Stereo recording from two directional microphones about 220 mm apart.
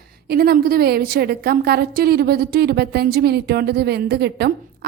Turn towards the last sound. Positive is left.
turn(degrees=-50)  # may be behind; listen again after turning